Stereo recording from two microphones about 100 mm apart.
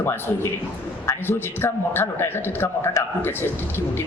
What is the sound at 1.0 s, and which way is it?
A woman's voice, 25° left (ahead or behind).